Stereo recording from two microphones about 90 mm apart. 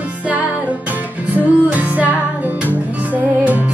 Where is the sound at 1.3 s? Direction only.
15° right (ahead or behind).